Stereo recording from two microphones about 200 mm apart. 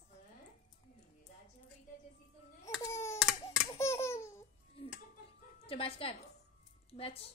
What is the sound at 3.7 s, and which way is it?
Baby laughter, 15° left (ahead or behind).